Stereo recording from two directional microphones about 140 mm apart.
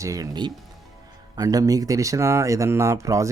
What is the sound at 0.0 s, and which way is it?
Speech, 25° right (ahead or behind).